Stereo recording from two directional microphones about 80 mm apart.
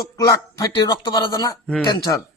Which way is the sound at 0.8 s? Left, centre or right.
Left.